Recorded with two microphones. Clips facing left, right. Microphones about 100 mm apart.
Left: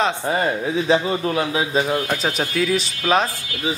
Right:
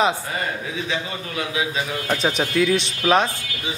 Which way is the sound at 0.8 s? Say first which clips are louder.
Left 9 dB; 40° left (ahead or behind).